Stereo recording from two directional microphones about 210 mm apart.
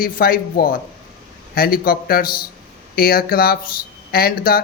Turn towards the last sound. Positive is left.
turn(degrees=45)  # may be behind; listen again after turning